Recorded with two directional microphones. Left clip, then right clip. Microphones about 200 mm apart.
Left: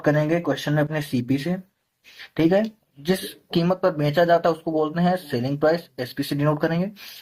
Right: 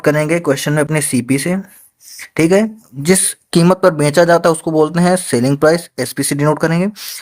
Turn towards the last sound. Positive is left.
turn(degrees=-45)  # may be behind; listen again after turning